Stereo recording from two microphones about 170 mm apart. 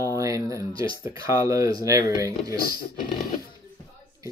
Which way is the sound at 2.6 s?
60° left (ahead or behind).